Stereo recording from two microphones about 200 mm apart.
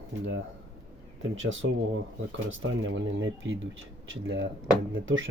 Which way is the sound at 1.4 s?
75° right (ahead or behind).